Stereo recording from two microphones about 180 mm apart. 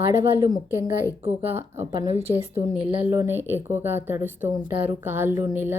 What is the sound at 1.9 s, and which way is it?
Speech, 30° right (ahead or behind).